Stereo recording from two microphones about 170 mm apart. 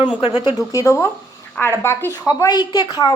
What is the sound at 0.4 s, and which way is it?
A woman's voice, 20° left (ahead or behind).